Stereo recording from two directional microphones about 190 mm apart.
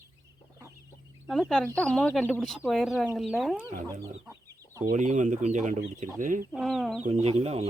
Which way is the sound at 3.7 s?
40° right (ahead or behind).